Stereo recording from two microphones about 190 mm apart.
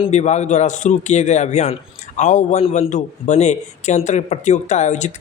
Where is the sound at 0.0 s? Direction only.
35° left (ahead or behind).